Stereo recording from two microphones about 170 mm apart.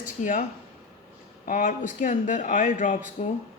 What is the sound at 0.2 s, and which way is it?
Speech, 50° left (ahead or behind).